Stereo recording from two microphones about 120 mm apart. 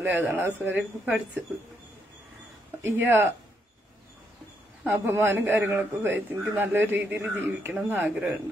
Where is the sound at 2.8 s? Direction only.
20° right (ahead or behind).